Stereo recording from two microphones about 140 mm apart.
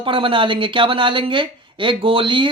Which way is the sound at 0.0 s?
40° right (ahead or behind).